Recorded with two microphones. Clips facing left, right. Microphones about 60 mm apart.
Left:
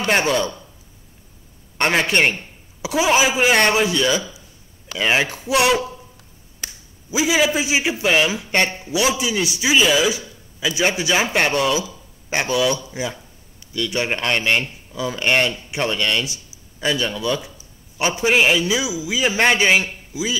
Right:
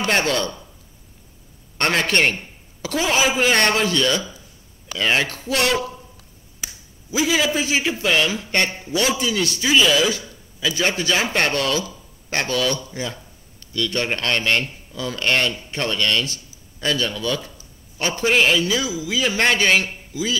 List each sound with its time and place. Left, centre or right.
0.0 s a man's voice: centre
1.8 s a man's voice: centre
7.1 s a man's voice: centre